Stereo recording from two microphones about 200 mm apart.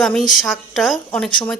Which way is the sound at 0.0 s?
Centre (ahead or behind).